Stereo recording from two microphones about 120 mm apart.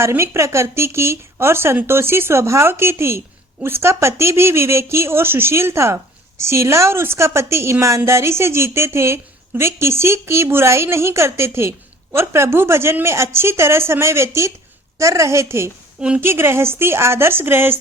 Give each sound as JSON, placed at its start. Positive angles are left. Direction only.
{"t": 0.0, "sound": "speech", "side_deg": -20}
{"t": 16.0, "sound": "a woman's voice", "side_deg": -10}
{"t": 16.2, "sound": "speech", "side_deg": -20}